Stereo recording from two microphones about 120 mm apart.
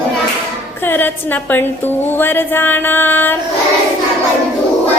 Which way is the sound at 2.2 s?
20° left (ahead or behind).